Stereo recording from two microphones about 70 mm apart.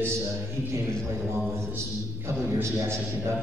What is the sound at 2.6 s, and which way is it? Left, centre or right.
Speech, right.